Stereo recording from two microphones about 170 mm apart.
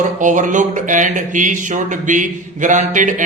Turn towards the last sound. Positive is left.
turn(degrees=-45)  # may be behind; listen again after turning